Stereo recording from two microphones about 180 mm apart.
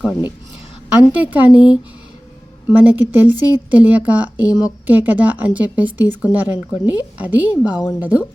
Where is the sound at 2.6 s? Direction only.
10° right (ahead or behind).